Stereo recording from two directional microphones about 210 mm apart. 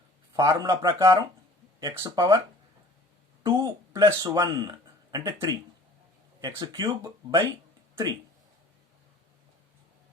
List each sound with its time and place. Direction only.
0.3 s speech: 15° right (ahead or behind)
3.4 s speech: 20° right (ahead or behind)